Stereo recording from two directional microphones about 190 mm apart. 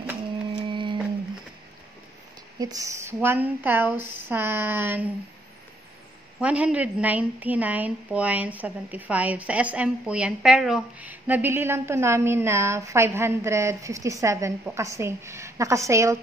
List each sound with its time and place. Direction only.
0.6 s a sound: 25° right (ahead or behind)
2.6 s a woman's voice: 20° right (ahead or behind)
6.4 s a woman's voice: 5° right (ahead or behind)